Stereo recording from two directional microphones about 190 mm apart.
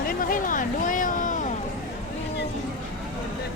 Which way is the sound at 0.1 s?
50° left (ahead or behind).